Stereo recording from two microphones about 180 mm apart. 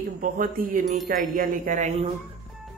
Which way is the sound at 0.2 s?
50° right (ahead or behind).